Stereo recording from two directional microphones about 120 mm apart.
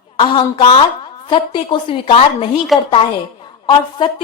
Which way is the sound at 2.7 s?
Centre (ahead or behind).